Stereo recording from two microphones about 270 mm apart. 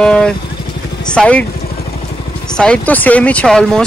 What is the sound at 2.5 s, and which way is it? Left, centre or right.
Speech, centre.